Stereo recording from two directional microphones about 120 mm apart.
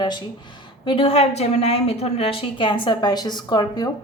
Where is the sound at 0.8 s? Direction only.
50° left (ahead or behind).